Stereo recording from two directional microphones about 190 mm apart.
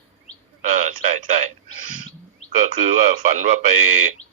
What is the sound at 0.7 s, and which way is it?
Speech, 40° right (ahead or behind).